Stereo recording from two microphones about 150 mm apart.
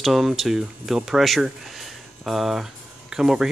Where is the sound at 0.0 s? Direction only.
Centre (ahead or behind).